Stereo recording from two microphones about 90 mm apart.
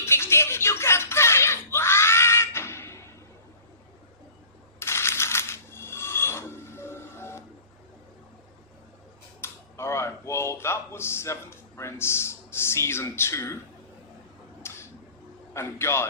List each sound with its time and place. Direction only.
0.0 s music: 30° left (ahead or behind)
4.8 s coin: 30° left (ahead or behind)
9.4 s a sound: 30° left (ahead or behind)
14.6 s tick-tock: 30° left (ahead or behind)
15.5 s a man's voice: 30° left (ahead or behind)